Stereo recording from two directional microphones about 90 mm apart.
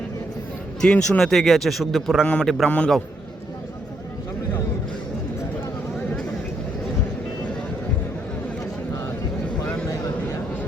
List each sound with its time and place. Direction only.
0.8 s speech: 10° left (ahead or behind)
2.2 s a man's voice: 15° left (ahead or behind)